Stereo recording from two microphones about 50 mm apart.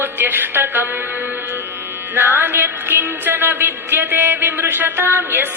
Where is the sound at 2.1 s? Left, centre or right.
Right.